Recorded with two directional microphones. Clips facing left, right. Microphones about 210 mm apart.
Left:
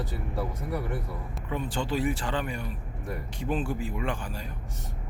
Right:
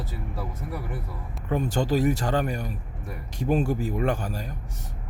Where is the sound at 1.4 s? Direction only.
45° right (ahead or behind).